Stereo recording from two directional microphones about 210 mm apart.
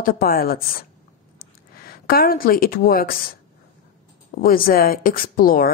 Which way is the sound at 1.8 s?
45° left (ahead or behind).